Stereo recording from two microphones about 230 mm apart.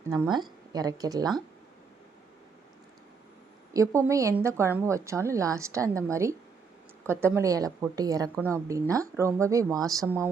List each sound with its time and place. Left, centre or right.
0.1 s a woman's voice: centre
3.7 s a woman's voice: centre